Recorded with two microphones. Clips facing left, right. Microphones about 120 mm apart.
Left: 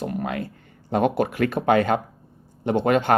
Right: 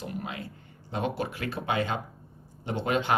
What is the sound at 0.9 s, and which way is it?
Speech, 55° left (ahead or behind).